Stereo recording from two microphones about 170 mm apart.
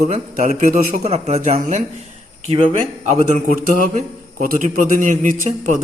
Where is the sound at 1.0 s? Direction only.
40° right (ahead or behind).